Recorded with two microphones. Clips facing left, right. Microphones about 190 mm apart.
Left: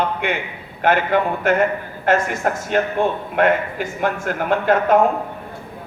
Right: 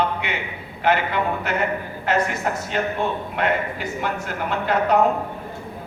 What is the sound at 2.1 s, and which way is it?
A man's voice, 50° left (ahead or behind).